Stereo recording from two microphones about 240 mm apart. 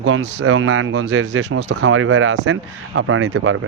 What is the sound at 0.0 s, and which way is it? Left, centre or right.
Speech, right.